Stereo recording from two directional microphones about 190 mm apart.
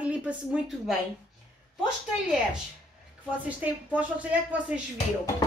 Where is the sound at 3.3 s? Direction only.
10° right (ahead or behind).